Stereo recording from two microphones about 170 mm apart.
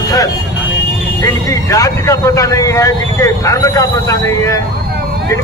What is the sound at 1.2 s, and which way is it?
Speech, 20° left (ahead or behind).